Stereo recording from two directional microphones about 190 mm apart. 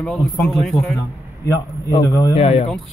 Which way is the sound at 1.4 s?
20° left (ahead or behind).